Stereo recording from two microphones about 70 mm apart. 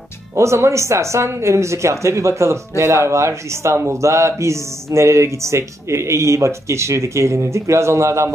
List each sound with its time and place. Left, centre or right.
0.4 s speech: right